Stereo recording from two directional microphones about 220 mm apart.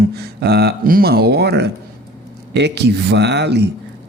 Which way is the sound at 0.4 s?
45° right (ahead or behind).